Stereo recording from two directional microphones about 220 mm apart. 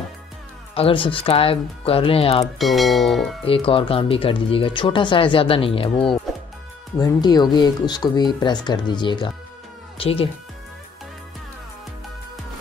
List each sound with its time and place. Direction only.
0.7 s speech: 25° left (ahead or behind)
2.4 s speech: centre (ahead or behind)
3.4 s speech: 25° left (ahead or behind)
7.0 s speech: 15° left (ahead or behind)